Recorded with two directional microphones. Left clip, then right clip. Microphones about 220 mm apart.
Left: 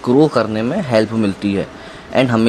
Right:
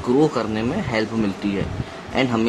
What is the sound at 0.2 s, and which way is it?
Speech, 30° left (ahead or behind).